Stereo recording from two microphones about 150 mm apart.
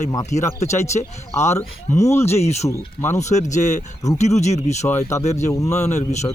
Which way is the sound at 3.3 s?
50° left (ahead or behind).